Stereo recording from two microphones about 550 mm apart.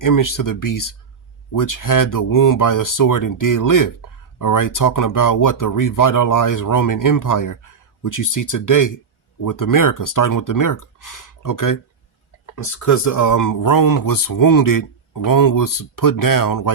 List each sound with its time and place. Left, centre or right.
0.0 s speech: left